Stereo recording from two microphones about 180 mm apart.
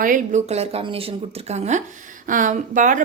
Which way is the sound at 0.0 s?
45° right (ahead or behind).